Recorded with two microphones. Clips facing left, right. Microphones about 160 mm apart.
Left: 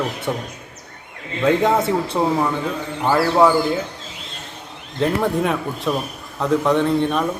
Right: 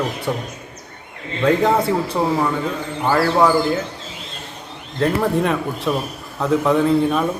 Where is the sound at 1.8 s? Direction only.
25° left (ahead or behind).